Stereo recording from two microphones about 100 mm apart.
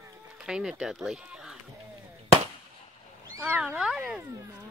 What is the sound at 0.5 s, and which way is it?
Speech, 5° right (ahead or behind).